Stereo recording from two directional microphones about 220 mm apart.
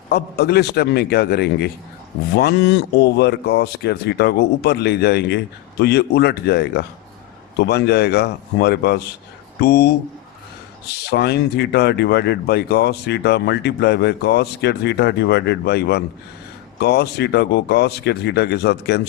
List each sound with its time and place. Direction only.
0.1 s speech: 45° left (ahead or behind)